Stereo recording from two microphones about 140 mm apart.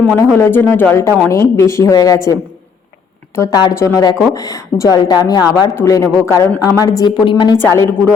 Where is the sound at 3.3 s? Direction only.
25° left (ahead or behind).